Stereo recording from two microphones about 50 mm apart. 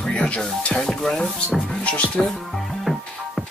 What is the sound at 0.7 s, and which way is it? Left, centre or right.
Stir, centre.